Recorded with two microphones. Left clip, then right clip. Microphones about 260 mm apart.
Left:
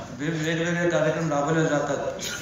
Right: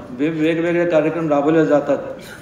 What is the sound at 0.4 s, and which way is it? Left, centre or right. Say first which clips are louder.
A man's voice: right 8 dB; right.